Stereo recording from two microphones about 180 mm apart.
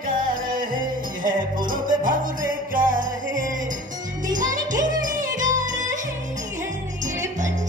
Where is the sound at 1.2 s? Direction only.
50° right (ahead or behind).